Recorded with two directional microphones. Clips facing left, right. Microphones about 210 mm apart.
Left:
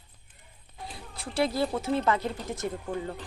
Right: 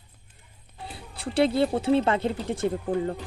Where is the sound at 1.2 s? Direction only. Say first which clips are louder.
Right 5 dB; 30° right (ahead or behind).